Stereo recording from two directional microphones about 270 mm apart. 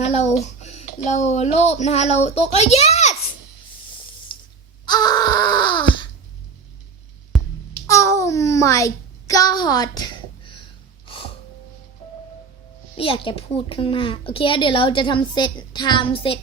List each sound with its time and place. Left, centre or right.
0.0 s speech: left
4.3 s a sound: centre
4.9 s wail: centre
7.3 s music: centre
7.9 s a sound: centre
13.0 s a woman's voice: centre